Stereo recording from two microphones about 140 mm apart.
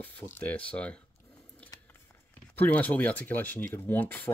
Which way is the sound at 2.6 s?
10° left (ahead or behind).